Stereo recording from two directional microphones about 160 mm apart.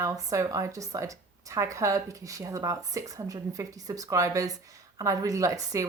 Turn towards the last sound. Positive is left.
turn(degrees=-20)  # may be behind; listen again after turning